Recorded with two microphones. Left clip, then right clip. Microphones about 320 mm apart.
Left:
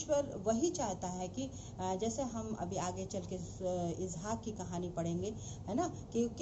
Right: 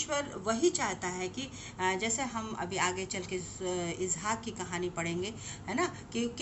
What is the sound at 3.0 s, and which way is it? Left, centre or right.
Speech, left.